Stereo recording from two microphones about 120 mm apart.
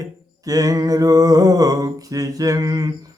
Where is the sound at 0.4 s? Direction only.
30° right (ahead or behind).